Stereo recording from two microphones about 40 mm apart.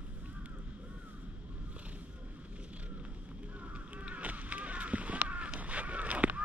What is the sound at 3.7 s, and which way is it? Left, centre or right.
Honk, right.